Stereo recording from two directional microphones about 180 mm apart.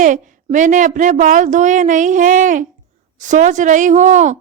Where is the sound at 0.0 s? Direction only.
45° right (ahead or behind).